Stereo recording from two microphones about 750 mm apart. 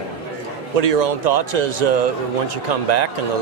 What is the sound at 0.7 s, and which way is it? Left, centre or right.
A man's voice, right.